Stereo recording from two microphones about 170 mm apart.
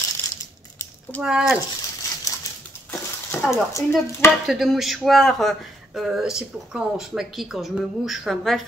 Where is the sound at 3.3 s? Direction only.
15° left (ahead or behind).